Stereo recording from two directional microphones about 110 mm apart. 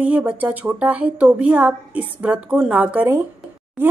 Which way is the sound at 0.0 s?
15° right (ahead or behind).